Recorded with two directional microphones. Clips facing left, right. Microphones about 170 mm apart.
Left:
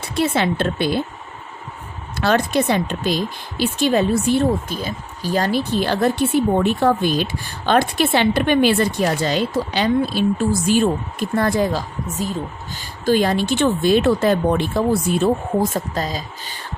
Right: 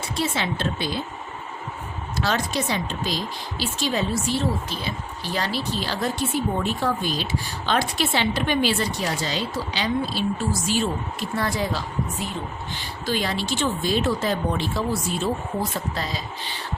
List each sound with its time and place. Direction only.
0.2 s a woman's voice: 55° left (ahead or behind)
2.1 s a woman's voice: 55° left (ahead or behind)